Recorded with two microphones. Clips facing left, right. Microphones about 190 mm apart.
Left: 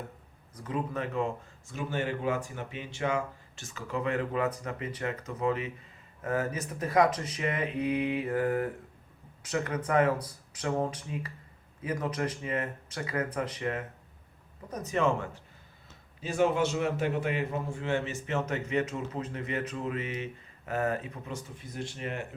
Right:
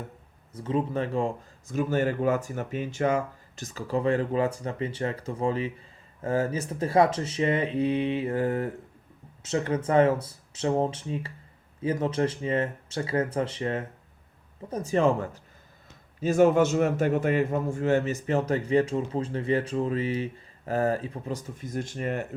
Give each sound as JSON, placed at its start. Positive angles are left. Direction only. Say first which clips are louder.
{"t": 0.5, "sound": "a man's voice", "louder": "right 6 dB", "side_deg": -25}
{"t": 1.7, "sound": "a man's voice", "louder": "right 7 dB", "side_deg": -45}